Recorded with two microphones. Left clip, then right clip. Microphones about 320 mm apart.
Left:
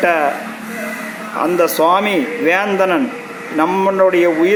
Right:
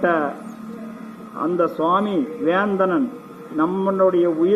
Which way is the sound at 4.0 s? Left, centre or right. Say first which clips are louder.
Left 4 dB; left.